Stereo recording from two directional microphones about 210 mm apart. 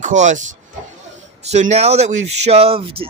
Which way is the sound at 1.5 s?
30° right (ahead or behind).